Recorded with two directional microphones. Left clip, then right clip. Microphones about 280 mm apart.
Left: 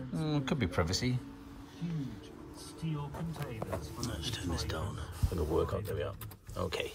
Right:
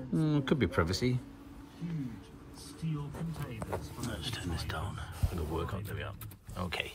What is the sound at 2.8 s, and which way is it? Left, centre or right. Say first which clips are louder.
Speech: left 1 dB; left.